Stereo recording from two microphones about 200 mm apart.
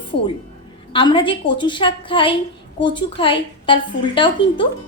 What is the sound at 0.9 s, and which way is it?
A woman's voice, 25° left (ahead or behind).